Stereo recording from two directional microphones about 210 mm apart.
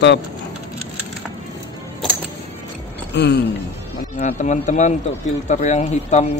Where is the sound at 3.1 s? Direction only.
50° left (ahead or behind).